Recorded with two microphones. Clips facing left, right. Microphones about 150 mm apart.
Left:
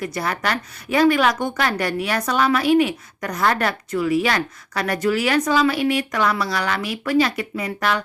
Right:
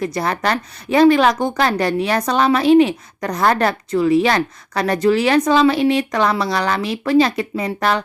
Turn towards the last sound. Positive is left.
turn(degrees=-35)  # may be behind; listen again after turning